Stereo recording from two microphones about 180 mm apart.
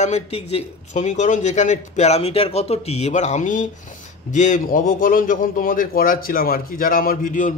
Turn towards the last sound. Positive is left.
turn(degrees=45)  # may be behind; listen again after turning